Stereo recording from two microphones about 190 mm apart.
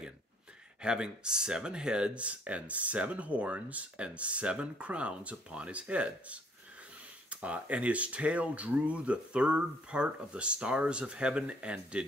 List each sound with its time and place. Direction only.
0.8 s speech: 5° right (ahead or behind)